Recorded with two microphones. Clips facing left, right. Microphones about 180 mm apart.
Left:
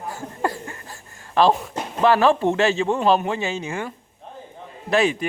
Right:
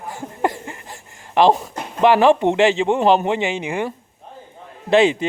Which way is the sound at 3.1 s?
20° right (ahead or behind).